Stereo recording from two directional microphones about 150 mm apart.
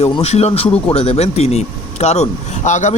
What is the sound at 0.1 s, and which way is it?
Speech, 45° left (ahead or behind).